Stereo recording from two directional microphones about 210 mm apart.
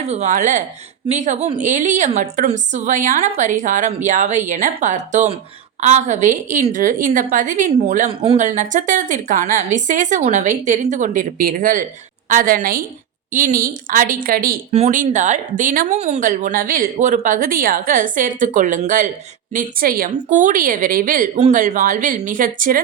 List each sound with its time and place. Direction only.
0.1 s speech: 35° right (ahead or behind)